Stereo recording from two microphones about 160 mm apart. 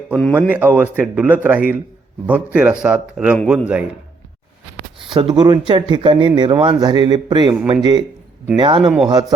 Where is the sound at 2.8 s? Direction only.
5° right (ahead or behind).